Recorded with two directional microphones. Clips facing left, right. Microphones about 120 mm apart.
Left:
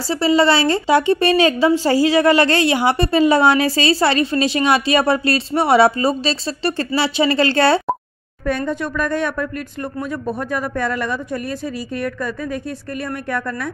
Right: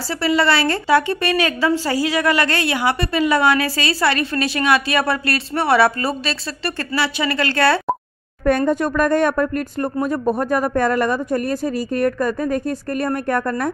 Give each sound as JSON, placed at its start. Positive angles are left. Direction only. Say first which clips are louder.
{"t": 0.1, "sound": "a woman's voice", "louder": "left 3 dB", "side_deg": 25}
{"t": 8.5, "sound": "speech", "louder": "right 4 dB", "side_deg": -50}